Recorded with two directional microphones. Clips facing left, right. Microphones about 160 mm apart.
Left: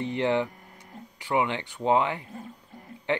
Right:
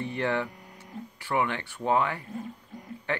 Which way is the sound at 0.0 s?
20° left (ahead or behind).